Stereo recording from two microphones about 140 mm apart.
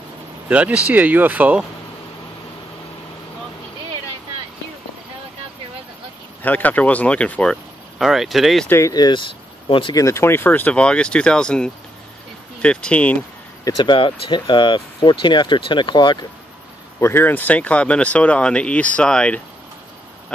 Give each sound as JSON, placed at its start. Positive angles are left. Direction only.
{"t": 0.5, "sound": "speech", "side_deg": -10}
{"t": 6.4, "sound": "speech", "side_deg": 10}
{"t": 8.0, "sound": "speech", "side_deg": 0}
{"t": 8.6, "sound": "speech", "side_deg": 20}
{"t": 9.9, "sound": "speech", "side_deg": 20}
{"t": 13.7, "sound": "speech", "side_deg": 40}
{"t": 17.0, "sound": "speech", "side_deg": 15}